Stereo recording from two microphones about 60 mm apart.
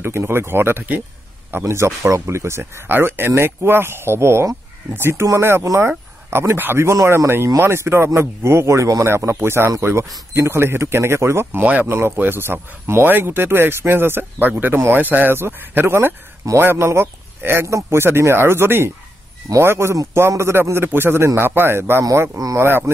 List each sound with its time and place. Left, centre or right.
0.0 s speech: right
1.5 s speech: right
11.6 s speech: right
11.9 s a man's voice: right